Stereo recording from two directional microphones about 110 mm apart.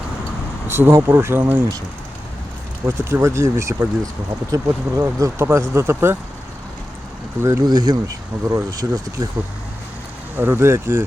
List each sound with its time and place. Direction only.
0.7 s speech: 20° right (ahead or behind)
2.8 s speech: 25° right (ahead or behind)
7.7 s speech: 35° right (ahead or behind)
10.3 s speech: 20° right (ahead or behind)